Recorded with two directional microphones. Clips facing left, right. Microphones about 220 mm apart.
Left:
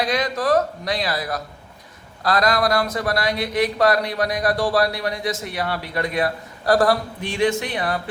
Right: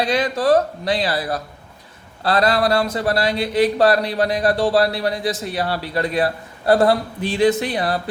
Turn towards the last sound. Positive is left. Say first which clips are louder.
# right 4 dB
turn(degrees=-35)  # may be behind; listen again after turning